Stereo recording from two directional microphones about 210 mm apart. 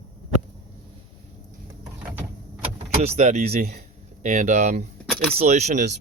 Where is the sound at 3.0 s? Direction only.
35° right (ahead or behind).